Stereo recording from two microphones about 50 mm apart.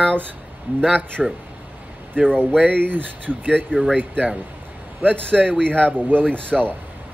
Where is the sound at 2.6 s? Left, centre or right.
Right.